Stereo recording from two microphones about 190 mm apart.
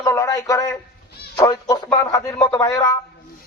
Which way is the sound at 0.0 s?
15° left (ahead or behind).